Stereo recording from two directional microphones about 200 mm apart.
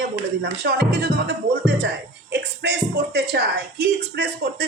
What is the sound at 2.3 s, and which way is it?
Speech, 60° right (ahead or behind).